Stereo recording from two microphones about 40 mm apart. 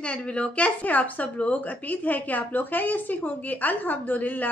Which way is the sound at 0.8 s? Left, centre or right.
Left.